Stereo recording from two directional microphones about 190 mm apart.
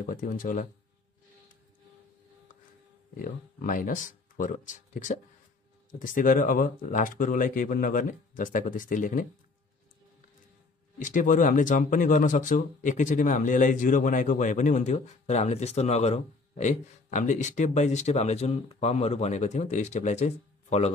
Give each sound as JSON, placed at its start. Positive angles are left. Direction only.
{"t": 0.0, "sound": "speech", "side_deg": 45}
{"t": 3.2, "sound": "speech", "side_deg": 45}
{"t": 11.0, "sound": "speech", "side_deg": 40}